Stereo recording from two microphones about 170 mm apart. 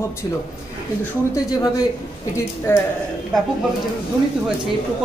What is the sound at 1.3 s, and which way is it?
A man's voice, 20° left (ahead or behind).